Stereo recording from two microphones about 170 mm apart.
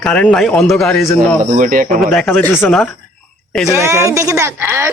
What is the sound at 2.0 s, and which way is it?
Speech, 5° left (ahead or behind).